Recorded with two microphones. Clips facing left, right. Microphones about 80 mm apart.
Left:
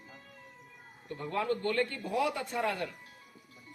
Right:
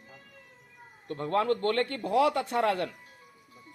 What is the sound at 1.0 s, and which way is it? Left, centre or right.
Speech, right.